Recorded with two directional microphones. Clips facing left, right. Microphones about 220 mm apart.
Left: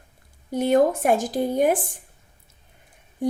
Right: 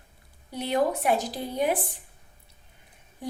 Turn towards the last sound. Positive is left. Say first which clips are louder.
# left 11 dB
turn(degrees=50)  # may be behind; listen again after turning